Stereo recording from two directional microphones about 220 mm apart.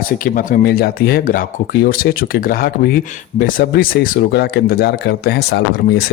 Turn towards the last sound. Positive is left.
turn(degrees=45)  # may be behind; listen again after turning